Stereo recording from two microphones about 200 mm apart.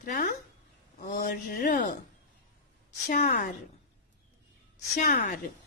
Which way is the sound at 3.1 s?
40° left (ahead or behind).